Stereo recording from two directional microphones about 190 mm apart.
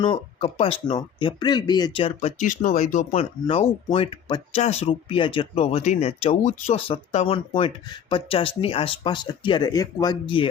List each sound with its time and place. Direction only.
0.0 s speech: 30° left (ahead or behind)
3.4 s speech: 25° left (ahead or behind)